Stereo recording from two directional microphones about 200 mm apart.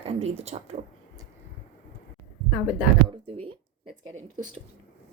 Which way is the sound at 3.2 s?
30° right (ahead or behind).